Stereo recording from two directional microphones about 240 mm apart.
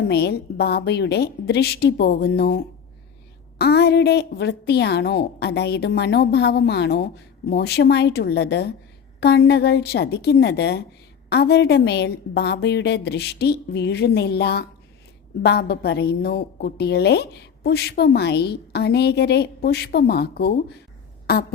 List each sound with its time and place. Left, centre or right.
0.1 s a woman's voice: left
3.6 s a woman's voice: left